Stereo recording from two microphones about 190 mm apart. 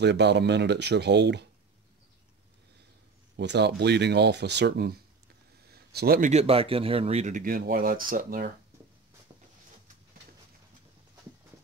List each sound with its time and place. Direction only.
0.0 s speech: 65° right (ahead or behind)
3.3 s speech: 60° right (ahead or behind)
5.7 s a sound: 55° right (ahead or behind)
6.3 s speech: 30° right (ahead or behind); by 8.5 s 45° right (ahead or behind)